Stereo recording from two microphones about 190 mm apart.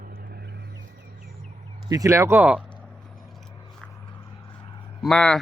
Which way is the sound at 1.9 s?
15° right (ahead or behind).